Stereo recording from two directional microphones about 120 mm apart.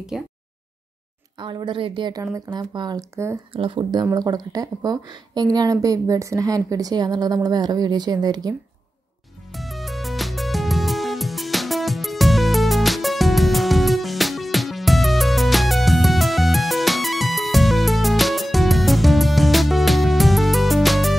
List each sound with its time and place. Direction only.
0.1 s a sound: 5° right (ahead or behind)
1.4 s a woman's voice: 40° right (ahead or behind)
4.0 s a woman's voice: 30° right (ahead or behind)
9.5 s music: centre (ahead or behind)